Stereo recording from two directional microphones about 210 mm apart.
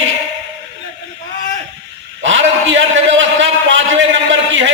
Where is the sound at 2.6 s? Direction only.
60° right (ahead or behind).